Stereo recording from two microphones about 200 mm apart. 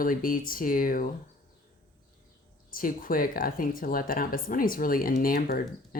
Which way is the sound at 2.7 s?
45° left (ahead or behind).